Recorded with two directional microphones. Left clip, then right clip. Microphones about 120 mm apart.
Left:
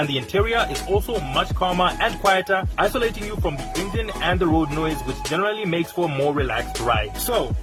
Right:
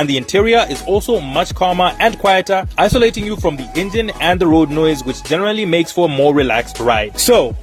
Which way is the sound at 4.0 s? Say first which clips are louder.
Right 8 dB; 75° right (ahead or behind).